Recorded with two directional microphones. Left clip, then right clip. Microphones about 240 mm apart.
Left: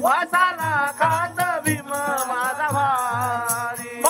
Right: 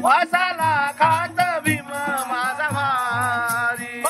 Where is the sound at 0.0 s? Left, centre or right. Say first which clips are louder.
Right 1 dB; centre.